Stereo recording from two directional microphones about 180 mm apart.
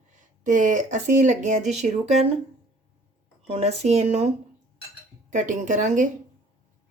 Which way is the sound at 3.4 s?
35° right (ahead or behind).